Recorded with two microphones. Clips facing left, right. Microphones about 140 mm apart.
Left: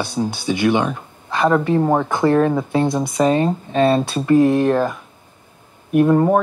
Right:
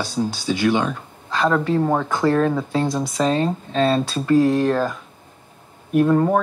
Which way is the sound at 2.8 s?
55° left (ahead or behind).